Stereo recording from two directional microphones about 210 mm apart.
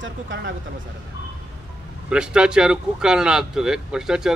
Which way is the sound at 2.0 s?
5° right (ahead or behind).